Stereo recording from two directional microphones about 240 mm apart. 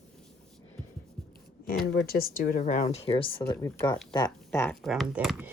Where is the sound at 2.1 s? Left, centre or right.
Left; by 5.5 s centre.